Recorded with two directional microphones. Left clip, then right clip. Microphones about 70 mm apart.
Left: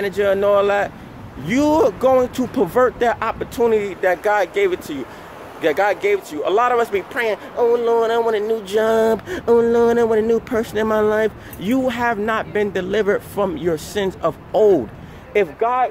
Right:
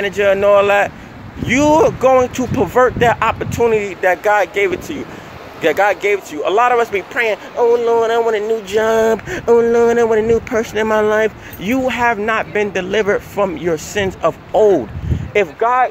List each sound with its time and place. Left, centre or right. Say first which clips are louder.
0.1 s speech: right 5 dB; left
4.6 s speech: right 2 dB; left
5.6 s speech: right 4 dB; left
13.7 s speech: right 3 dB; left
15.3 s speech: right 4 dB; centre